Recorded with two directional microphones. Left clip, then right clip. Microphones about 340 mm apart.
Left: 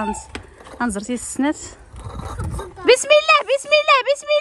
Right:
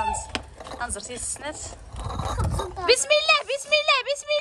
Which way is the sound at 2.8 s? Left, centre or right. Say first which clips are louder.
Left 7 dB; centre.